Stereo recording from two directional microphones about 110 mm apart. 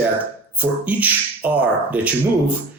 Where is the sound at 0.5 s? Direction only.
15° right (ahead or behind).